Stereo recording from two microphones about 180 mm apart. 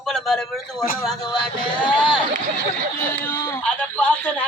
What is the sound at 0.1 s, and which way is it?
Speech, centre (ahead or behind).